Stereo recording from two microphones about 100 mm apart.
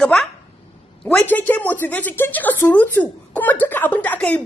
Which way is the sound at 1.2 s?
15° left (ahead or behind).